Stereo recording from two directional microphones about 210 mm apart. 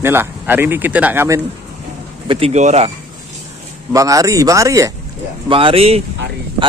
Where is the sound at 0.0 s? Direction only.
10° right (ahead or behind).